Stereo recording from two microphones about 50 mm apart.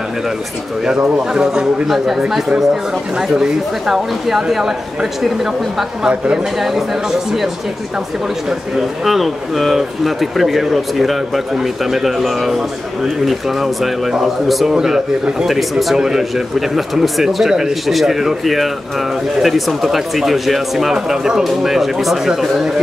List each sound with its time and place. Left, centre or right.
1.3 s a man's voice: centre
6.0 s a man's voice: centre
6.6 s a man's voice: centre
8.5 s a man's voice: centre